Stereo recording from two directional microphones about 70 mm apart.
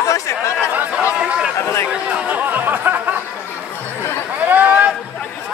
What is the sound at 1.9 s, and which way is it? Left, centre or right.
Chatter, centre.